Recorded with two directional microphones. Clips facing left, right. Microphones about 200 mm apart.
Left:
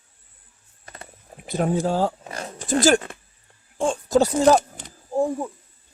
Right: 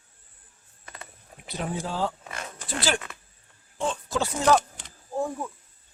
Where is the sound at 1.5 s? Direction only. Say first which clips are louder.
Left 9 dB; 45° left (ahead or behind).